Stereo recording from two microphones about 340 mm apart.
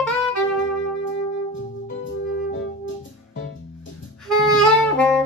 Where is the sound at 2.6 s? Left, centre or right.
Left.